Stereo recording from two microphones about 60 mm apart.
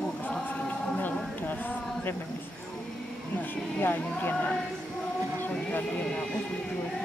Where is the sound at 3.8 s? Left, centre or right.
Left.